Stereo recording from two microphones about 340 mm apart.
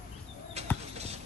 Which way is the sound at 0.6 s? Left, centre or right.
Centre.